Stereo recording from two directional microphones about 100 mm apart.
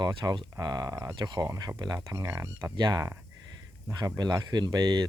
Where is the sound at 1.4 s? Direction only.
35° right (ahead or behind).